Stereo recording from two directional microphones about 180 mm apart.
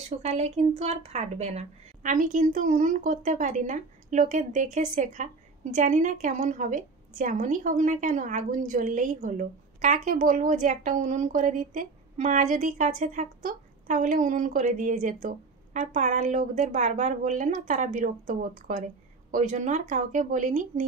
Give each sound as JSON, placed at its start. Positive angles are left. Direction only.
{"t": 0.2, "sound": "speech", "side_deg": -35}